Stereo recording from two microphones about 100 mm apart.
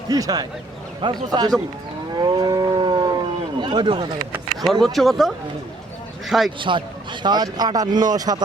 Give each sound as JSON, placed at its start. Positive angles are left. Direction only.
{"t": 0.1, "sound": "speech", "side_deg": -40}
{"t": 2.2, "sound": "a sound", "side_deg": -45}
{"t": 3.6, "sound": "speech", "side_deg": -50}
{"t": 4.6, "sound": "speech", "side_deg": 0}
{"t": 6.6, "sound": "speech", "side_deg": -55}